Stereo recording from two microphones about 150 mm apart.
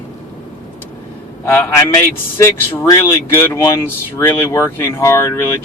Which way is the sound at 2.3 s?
20° left (ahead or behind).